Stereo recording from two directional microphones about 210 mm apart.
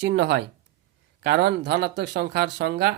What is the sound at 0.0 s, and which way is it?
Speech, 55° right (ahead or behind).